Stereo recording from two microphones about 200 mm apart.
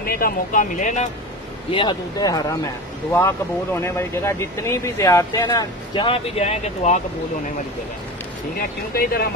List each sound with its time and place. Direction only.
0.0 s speech: 45° left (ahead or behind)
1.7 s speech: 25° left (ahead or behind)
8.5 s speech: 50° left (ahead or behind)